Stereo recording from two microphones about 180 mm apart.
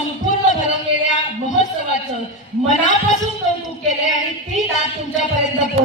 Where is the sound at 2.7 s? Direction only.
45° left (ahead or behind).